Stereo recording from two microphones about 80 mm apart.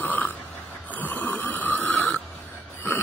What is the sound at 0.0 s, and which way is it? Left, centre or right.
Snoring, left.